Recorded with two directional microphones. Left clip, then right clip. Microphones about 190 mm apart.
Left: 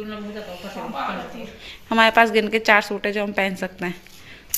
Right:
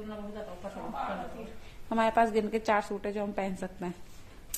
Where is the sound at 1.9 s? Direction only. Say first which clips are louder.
Left 11 dB; centre (ahead or behind).